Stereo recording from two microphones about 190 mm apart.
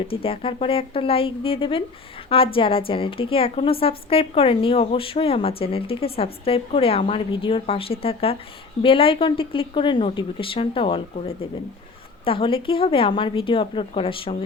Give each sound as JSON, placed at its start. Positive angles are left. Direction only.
{"t": 0.1, "sound": "a woman's voice", "side_deg": 30}